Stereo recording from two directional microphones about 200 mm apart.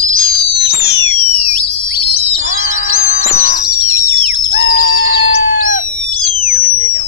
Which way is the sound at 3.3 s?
50° left (ahead or behind).